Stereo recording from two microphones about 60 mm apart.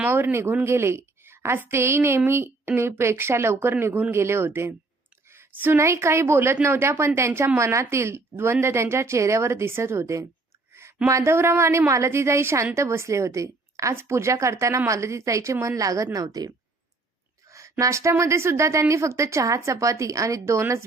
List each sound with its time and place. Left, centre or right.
0.1 s a woman's voice: right
5.3 s a sound: right
5.7 s a woman's voice: right
13.9 s a woman's voice: right
16.1 s a woman's voice: right
17.5 s a sound: right
18.2 s a woman's voice: right